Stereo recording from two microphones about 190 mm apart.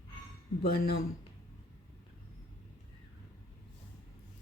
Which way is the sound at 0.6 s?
55° left (ahead or behind).